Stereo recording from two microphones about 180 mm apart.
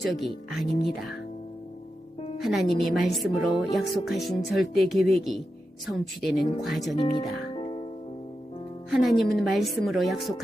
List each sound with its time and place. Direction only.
0.0 s speech: centre (ahead or behind)
2.4 s speech: centre (ahead or behind)
6.9 s speech: 25° left (ahead or behind)
7.5 s music: 30° left (ahead or behind)
8.9 s speech: centre (ahead or behind)